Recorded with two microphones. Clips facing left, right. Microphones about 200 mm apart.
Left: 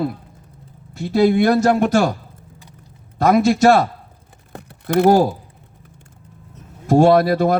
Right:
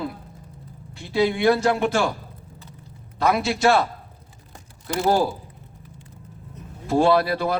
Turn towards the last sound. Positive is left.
turn(degrees=45)  # may be behind; listen again after turning